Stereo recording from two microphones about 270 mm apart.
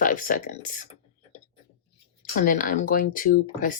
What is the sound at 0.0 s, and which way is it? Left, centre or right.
Speech, left.